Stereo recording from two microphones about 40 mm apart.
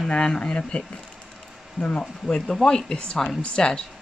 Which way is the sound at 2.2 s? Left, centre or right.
Centre.